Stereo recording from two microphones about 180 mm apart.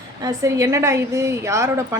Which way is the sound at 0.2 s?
20° right (ahead or behind).